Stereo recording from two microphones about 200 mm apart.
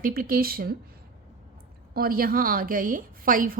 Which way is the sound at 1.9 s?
50° right (ahead or behind).